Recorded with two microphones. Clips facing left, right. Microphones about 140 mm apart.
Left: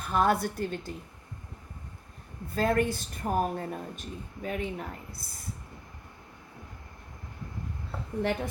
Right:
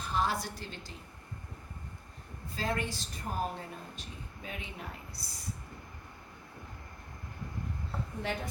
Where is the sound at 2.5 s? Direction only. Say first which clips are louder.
Left 9 dB; 55° left (ahead or behind).